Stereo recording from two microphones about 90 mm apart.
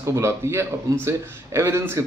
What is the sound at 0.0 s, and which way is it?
A man's voice, 35° right (ahead or behind).